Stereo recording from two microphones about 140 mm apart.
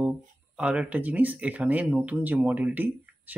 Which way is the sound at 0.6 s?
10° right (ahead or behind).